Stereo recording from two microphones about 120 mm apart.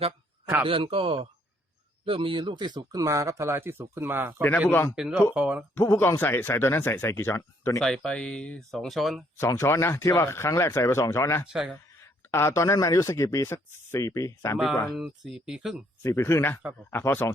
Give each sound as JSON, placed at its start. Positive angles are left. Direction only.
{"t": 0.6, "sound": "speech", "side_deg": -45}
{"t": 4.4, "sound": "a man's voice", "side_deg": 15}
{"t": 4.9, "sound": "speech", "side_deg": -10}
{"t": 5.7, "sound": "speech", "side_deg": 20}
{"t": 7.8, "sound": "speech", "side_deg": 5}
{"t": 9.4, "sound": "speech", "side_deg": 20}
{"t": 11.4, "sound": "speech", "side_deg": -5}
{"t": 12.3, "sound": "speech", "side_deg": 20}
{"t": 14.9, "sound": "speech", "side_deg": 0}
{"t": 16.0, "sound": "speech", "side_deg": 20}